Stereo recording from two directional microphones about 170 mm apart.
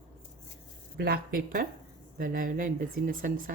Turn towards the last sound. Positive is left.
turn(degrees=-55)  # may be behind; listen again after turning